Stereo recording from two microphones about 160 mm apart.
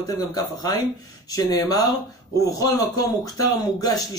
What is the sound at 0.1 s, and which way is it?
A man's voice, 25° left (ahead or behind).